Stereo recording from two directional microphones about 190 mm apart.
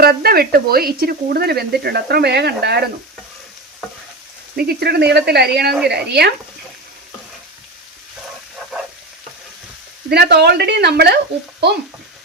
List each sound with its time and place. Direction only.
0.0 s speech: 55° right (ahead or behind)
4.5 s speech: 55° right (ahead or behind)
10.1 s speech: 60° right (ahead or behind)